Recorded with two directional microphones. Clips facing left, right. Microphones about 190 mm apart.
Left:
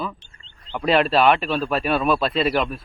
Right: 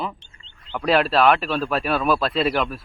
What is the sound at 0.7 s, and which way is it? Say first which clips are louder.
Speech: left 1 dB; centre (ahead or behind).